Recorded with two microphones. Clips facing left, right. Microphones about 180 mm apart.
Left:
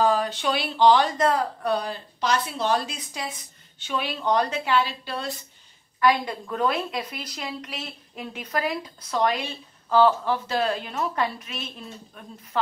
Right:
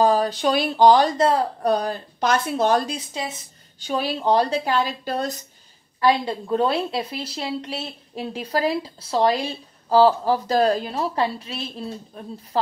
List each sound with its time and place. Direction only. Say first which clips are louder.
0.0 s a woman's voice: right 4 dB; 35° right (ahead or behind)
5.9 s a woman's voice: right 2 dB; 30° right (ahead or behind)